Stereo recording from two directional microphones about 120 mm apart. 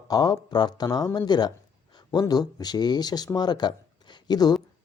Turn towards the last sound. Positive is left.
turn(degrees=35)  # may be behind; listen again after turning